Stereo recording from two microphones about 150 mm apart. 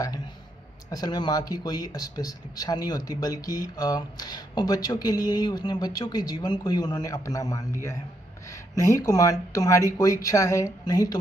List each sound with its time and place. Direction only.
0.8 s speech: 25° left (ahead or behind)
8.9 s speech: 20° left (ahead or behind)